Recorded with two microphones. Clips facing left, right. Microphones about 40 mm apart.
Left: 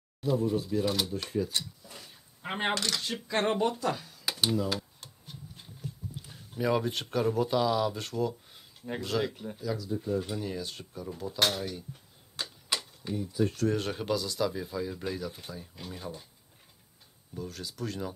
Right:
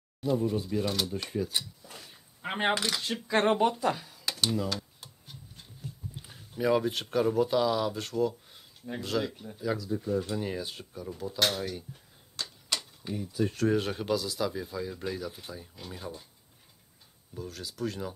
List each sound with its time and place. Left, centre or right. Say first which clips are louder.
0.5 s speech: left 1 dB; centre
4.3 s computer keyboard: left 1 dB; centre
5.0 s tick-tock: left 2 dB; centre
6.5 s speech: right 2 dB; centre
10.4 s speech: right 2 dB; centre
10.7 s speech: even; centre
12.4 s typewriter: left 1 dB; centre
13.1 s speech: left 1 dB; centre
17.3 s speech: left 1 dB; centre